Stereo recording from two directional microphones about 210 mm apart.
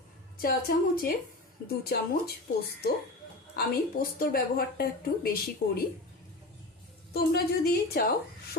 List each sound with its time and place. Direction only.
0.4 s a woman's voice: 45° left (ahead or behind)
3.5 s a woman's voice: 45° left (ahead or behind)
7.1 s a woman's voice: 45° left (ahead or behind)